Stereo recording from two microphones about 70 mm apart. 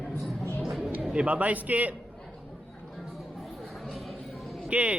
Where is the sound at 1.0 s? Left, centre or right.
Centre.